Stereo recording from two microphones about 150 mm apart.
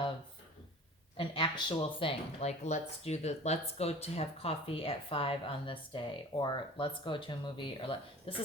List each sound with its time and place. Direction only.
1.1 s speech: 35° left (ahead or behind)